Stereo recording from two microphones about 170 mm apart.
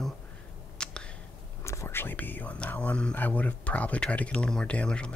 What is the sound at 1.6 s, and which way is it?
Speech, 15° left (ahead or behind).